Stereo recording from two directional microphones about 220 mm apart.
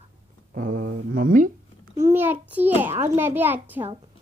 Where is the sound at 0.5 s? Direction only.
35° right (ahead or behind).